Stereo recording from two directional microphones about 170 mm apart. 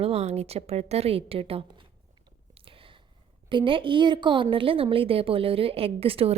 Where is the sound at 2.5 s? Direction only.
30° right (ahead or behind).